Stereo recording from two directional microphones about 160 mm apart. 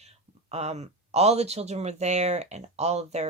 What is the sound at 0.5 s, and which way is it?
Speech, 45° right (ahead or behind).